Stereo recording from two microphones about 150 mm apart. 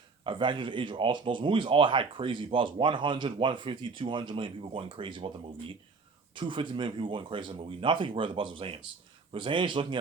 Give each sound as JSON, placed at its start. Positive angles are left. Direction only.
{"t": 0.3, "sound": "speech", "side_deg": -30}